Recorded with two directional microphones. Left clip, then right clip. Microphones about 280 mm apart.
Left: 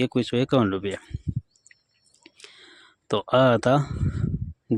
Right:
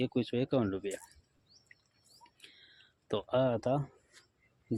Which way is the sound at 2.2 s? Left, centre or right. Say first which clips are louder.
Left 11 dB; left.